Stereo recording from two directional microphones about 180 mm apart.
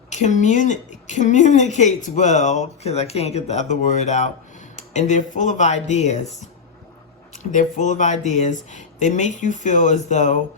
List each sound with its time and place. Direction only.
0.1 s a woman's voice: 40° left (ahead or behind)
7.5 s speech: 45° left (ahead or behind)